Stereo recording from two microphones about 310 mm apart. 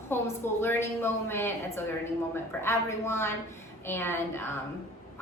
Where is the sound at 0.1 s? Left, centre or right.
Centre.